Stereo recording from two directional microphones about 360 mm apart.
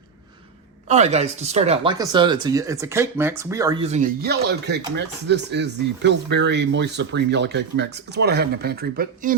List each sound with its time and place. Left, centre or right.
0.9 s speech: centre